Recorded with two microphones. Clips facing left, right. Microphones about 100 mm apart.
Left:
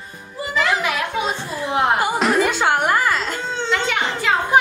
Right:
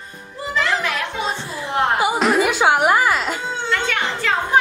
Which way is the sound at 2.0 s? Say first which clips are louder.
Right 1 dB; 5° right (ahead or behind).